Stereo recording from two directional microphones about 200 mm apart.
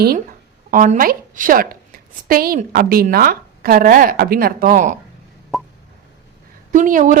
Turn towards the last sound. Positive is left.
turn(degrees=-40)  # may be behind; listen again after turning